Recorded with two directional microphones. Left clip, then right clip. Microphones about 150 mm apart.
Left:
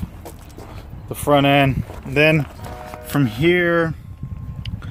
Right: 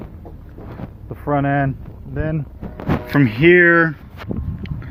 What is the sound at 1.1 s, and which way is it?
Speech, 35° left (ahead or behind).